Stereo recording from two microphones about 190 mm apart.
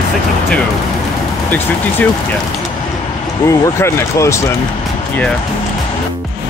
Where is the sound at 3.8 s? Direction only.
15° left (ahead or behind).